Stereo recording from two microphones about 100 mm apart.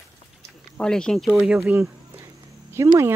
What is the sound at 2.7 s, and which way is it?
Speech, 25° right (ahead or behind).